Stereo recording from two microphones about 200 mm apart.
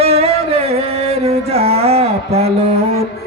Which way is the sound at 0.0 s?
30° right (ahead or behind).